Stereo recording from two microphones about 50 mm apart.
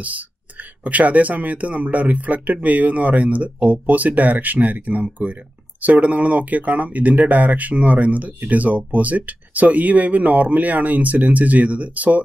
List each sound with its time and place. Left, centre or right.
0.8 s speech: right